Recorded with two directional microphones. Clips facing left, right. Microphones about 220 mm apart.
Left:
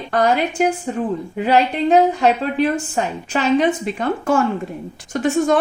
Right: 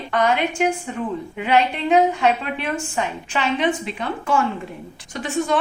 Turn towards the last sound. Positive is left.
turn(degrees=45)  # may be behind; listen again after turning